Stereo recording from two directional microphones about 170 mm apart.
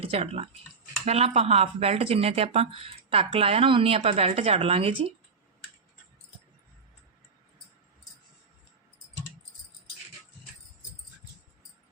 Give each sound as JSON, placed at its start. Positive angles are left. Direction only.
{"t": 0.0, "sound": "speech", "side_deg": -35}